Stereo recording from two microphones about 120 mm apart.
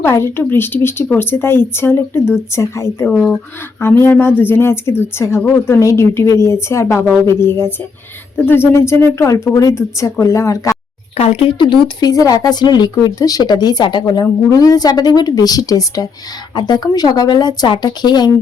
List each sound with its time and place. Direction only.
0.0 s speech: 20° left (ahead or behind)
11.2 s speech: 60° left (ahead or behind)
11.5 s speech: 40° left (ahead or behind)